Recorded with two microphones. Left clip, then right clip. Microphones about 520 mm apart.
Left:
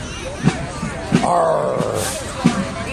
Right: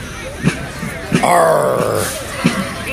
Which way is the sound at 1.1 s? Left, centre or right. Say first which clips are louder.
Right 5 dB; right.